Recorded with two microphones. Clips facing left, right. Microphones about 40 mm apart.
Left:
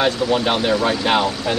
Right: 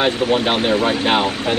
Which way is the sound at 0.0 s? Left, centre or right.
Right.